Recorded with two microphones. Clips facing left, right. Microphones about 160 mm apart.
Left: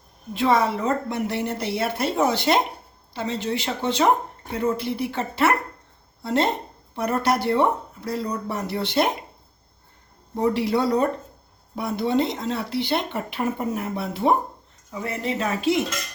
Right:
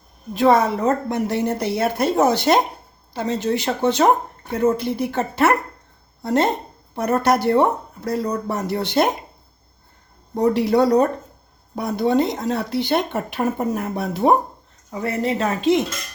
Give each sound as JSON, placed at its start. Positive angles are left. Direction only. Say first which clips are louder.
{"t": 0.3, "sound": "speech", "louder": "right 4 dB", "side_deg": -45}
{"t": 10.3, "sound": "speech", "louder": "right 5 dB", "side_deg": -45}